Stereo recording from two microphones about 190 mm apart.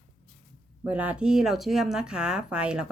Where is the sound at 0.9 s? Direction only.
5° right (ahead or behind).